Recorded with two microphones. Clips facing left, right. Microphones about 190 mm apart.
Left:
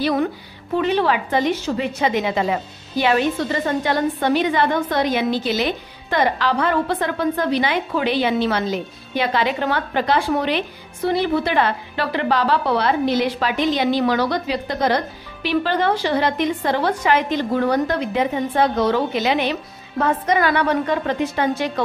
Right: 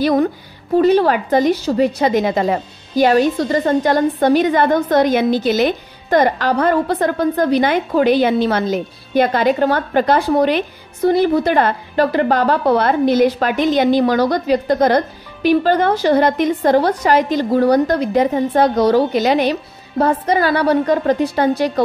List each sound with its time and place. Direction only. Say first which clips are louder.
0.0 s a woman's voice: right 5 dB; 45° right (ahead or behind)